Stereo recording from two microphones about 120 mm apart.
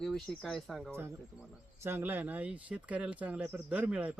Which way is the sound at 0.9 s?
20° right (ahead or behind).